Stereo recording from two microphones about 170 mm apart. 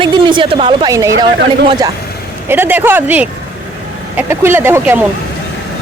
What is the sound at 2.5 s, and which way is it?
Speech, 10° right (ahead or behind).